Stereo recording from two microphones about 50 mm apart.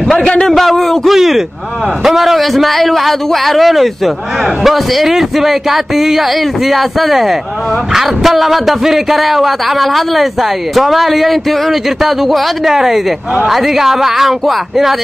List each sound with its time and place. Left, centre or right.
0.2 s a man's voice: centre
0.5 s a man's voice: centre